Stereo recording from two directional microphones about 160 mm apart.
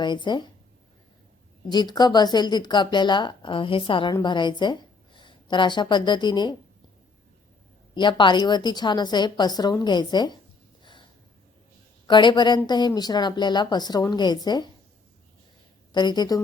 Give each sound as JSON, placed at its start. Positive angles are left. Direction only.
{"t": 0.0, "sound": "a woman's voice", "side_deg": 30}
{"t": 1.7, "sound": "a woman's voice", "side_deg": 25}
{"t": 7.9, "sound": "a woman's voice", "side_deg": 30}
{"t": 12.0, "sound": "a woman's voice", "side_deg": 30}
{"t": 15.9, "sound": "a woman's voice", "side_deg": 25}